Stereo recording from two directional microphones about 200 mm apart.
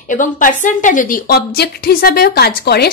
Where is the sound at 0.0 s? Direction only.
40° left (ahead or behind).